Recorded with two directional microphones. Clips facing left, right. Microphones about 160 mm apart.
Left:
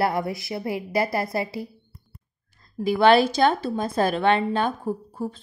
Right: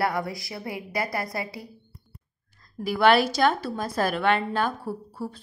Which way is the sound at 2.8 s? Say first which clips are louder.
Left 3 dB; 25° left (ahead or behind).